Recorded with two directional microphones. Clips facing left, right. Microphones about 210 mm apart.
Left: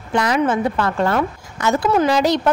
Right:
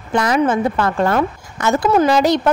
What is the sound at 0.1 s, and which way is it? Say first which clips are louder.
A woman's voice: right 2 dB; 50° right (ahead or behind).